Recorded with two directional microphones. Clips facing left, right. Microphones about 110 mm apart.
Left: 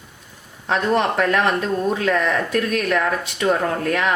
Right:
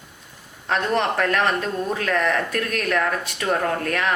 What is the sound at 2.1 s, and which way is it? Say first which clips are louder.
Speech: left 2 dB; 20° left (ahead or behind).